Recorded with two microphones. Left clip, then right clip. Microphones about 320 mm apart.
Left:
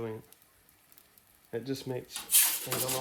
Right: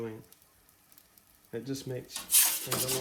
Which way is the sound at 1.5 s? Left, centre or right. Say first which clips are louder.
Left 2 dB; left.